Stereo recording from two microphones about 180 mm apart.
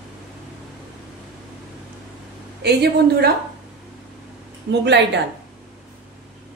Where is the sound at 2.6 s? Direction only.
65° right (ahead or behind).